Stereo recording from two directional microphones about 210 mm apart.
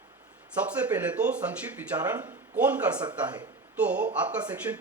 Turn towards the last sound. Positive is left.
turn(degrees=-5)  # may be behind; listen again after turning